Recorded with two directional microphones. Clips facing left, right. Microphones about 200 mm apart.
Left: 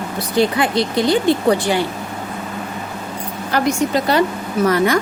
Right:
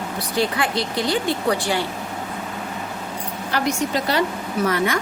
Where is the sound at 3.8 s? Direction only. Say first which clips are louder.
Left 5 dB; 50° left (ahead or behind).